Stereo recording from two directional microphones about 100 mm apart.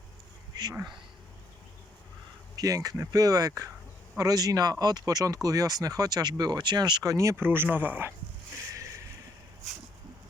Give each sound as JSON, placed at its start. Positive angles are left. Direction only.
{"t": 0.5, "sound": "speech", "side_deg": -40}
{"t": 2.6, "sound": "speech", "side_deg": -35}
{"t": 8.7, "sound": "a sound", "side_deg": -30}